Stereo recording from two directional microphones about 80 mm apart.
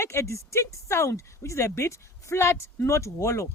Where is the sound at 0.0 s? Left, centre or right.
Left.